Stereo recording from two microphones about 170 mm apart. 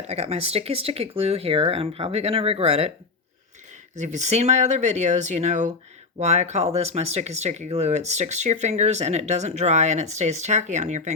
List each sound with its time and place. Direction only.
0.1 s speech: 35° right (ahead or behind)
3.9 s speech: 45° right (ahead or behind)